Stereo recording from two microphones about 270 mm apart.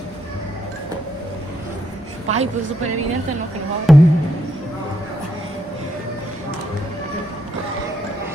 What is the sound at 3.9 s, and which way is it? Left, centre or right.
Speech, centre.